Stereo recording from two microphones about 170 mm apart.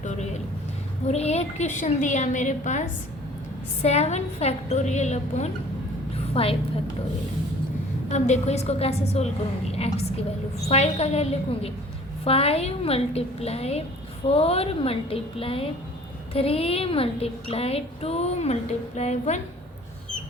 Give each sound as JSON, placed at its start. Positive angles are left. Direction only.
{"t": 1.0, "sound": "a woman's voice", "side_deg": 40}
{"t": 3.8, "sound": "a woman's voice", "side_deg": 40}
{"t": 8.1, "sound": "a woman's voice", "side_deg": 40}
{"t": 10.7, "sound": "a woman's voice", "side_deg": 40}